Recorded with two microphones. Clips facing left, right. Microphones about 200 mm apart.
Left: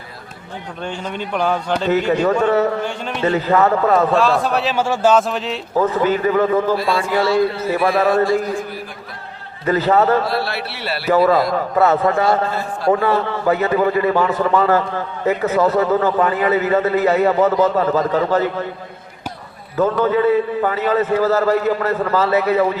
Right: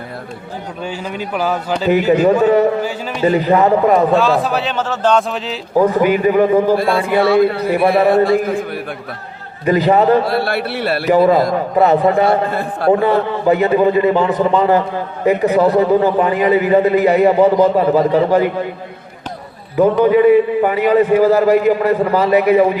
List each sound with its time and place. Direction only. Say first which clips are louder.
0.9 s a man's voice: right 1 dB; 5° right (ahead or behind)
4.1 s a man's voice: right 2 dB; centre (ahead or behind)
5.7 s a man's voice: right 4 dB; 15° right (ahead or behind)
6.7 s a man's voice: right 4 dB; 55° right (ahead or behind)
9.6 s a man's voice: right 3 dB; 15° right (ahead or behind)
10.2 s a man's voice: right 5 dB; 55° right (ahead or behind)
11.5 s a man's voice: right 3 dB; 15° right (ahead or behind)
12.2 s a man's voice: right 3 dB; 60° right (ahead or behind)
12.9 s a man's voice: right 3 dB; 15° right (ahead or behind)
19.7 s a man's voice: right 5 dB; 15° right (ahead or behind)